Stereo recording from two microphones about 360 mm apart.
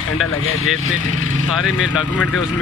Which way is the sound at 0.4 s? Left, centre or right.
Left.